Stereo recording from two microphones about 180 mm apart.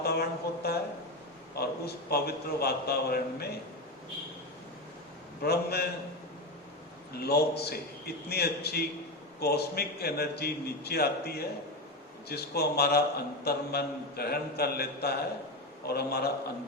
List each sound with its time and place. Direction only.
0.0 s a man's voice: 60° left (ahead or behind)
5.4 s a man's voice: 60° left (ahead or behind)
7.1 s a man's voice: 60° left (ahead or behind)